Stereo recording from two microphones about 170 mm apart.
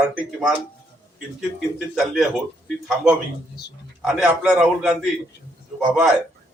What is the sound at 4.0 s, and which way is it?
Speech, centre (ahead or behind).